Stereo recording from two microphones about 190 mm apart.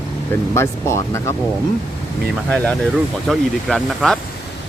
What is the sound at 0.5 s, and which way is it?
Speech, 15° left (ahead or behind).